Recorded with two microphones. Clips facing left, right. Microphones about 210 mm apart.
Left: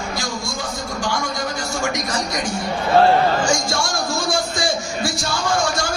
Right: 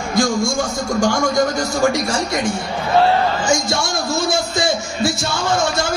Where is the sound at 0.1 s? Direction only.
50° right (ahead or behind).